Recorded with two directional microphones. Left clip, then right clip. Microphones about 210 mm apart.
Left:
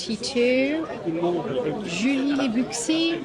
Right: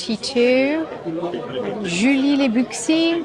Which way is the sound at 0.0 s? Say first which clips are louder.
Right 4 dB; 15° right (ahead or behind).